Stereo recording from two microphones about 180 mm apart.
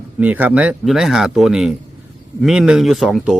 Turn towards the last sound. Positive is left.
turn(degrees=0)  # may be behind; listen again after turning